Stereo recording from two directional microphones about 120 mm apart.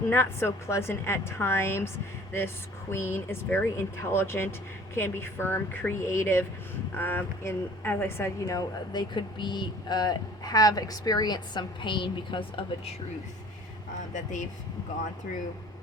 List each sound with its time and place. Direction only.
0.1 s a woman's voice: 20° left (ahead or behind)
2.9 s a woman's voice: 20° left (ahead or behind); by 12.9 s 45° left (ahead or behind)
14.1 s speech: 90° left